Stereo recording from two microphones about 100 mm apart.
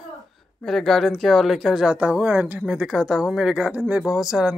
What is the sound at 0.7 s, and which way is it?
Speech, 5° left (ahead or behind).